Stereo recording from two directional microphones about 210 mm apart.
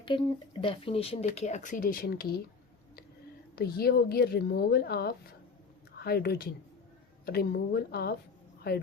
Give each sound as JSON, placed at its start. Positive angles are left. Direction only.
{"t": 0.0, "sound": "speech", "side_deg": 25}
{"t": 3.5, "sound": "a woman's voice", "side_deg": 50}